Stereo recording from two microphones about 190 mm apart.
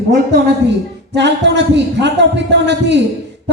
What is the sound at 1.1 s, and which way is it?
A man's voice, 65° right (ahead or behind).